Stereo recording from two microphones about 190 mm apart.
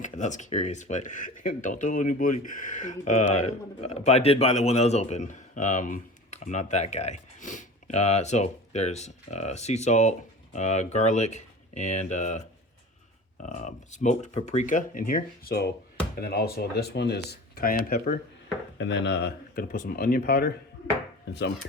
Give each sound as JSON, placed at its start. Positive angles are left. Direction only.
{"t": 0.0, "sound": "speech", "side_deg": 40}
{"t": 13.4, "sound": "speech", "side_deg": 40}
{"t": 18.8, "sound": "speech", "side_deg": 70}
{"t": 19.7, "sound": "speech", "side_deg": 50}